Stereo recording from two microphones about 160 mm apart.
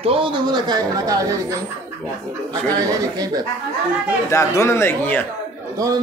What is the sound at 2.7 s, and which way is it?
Speech, 25° right (ahead or behind).